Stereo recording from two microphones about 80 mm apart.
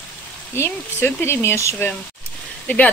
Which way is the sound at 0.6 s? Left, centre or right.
Left.